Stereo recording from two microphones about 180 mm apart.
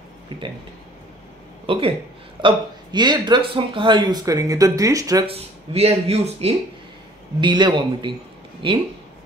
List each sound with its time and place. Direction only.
1.7 s speech: 30° right (ahead or behind)
5.2 s speech: 35° right (ahead or behind)
7.3 s speech: 25° right (ahead or behind)